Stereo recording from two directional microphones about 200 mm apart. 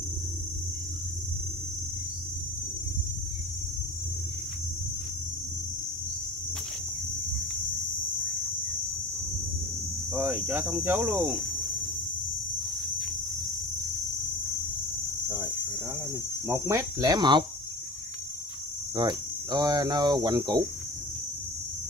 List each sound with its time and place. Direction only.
10.1 s cricket: 10° right (ahead or behind)
16.4 s cricket: 15° right (ahead or behind)
18.9 s speech: 20° right (ahead or behind)